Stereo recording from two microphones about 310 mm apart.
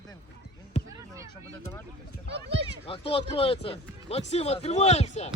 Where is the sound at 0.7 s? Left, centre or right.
Left.